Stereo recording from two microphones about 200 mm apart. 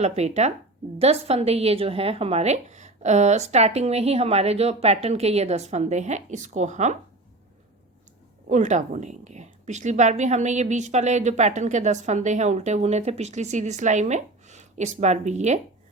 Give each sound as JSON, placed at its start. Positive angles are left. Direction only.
{"t": 0.0, "sound": "speech", "side_deg": -35}
{"t": 8.4, "sound": "speech", "side_deg": -35}